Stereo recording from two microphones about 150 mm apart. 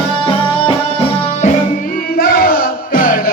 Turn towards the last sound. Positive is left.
turn(degrees=65)  # may be behind; listen again after turning